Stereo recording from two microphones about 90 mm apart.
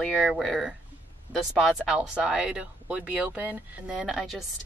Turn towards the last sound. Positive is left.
turn(degrees=0)  # may be behind; listen again after turning